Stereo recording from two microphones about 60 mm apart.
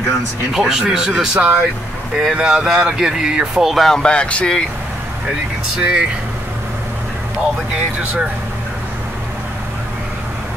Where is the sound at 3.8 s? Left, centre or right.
Centre.